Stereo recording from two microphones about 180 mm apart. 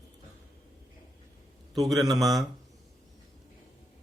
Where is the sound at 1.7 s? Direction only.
Centre (ahead or behind).